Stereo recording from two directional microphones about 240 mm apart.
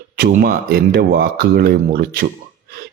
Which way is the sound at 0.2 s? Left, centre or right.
Right.